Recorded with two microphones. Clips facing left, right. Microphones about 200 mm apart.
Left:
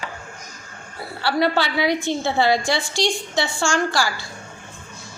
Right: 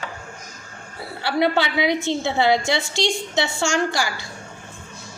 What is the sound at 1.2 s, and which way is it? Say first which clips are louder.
A woman's voice: even; 20° right (ahead or behind).